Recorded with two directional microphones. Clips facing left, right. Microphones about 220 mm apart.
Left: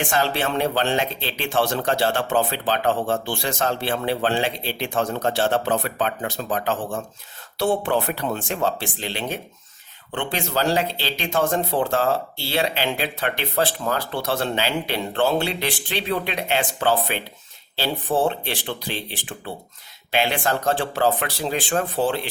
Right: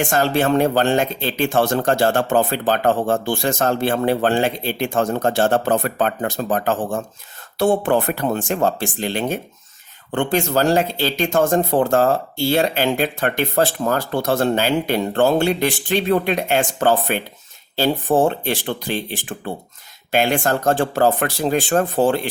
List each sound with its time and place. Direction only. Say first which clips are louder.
0.0 s speech: right 5 dB; 45° right (ahead or behind)